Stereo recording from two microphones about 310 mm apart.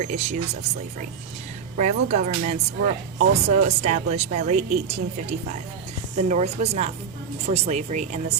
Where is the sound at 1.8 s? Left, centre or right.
Right.